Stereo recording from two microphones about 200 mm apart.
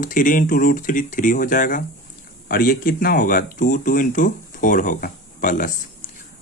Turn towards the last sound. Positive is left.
turn(degrees=40)  # may be behind; listen again after turning